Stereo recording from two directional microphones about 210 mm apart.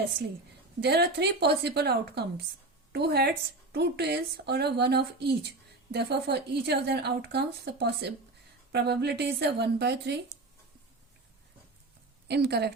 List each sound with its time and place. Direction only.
0.8 s speech: 50° right (ahead or behind)
12.3 s speech: 50° right (ahead or behind)